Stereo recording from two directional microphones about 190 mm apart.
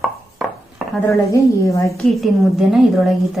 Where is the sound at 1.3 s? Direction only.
15° left (ahead or behind).